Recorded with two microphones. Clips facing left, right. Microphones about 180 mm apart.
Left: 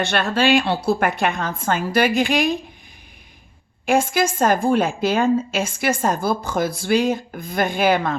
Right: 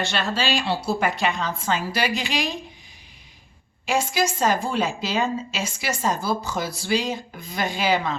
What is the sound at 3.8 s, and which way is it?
A woman's voice, 55° left (ahead or behind).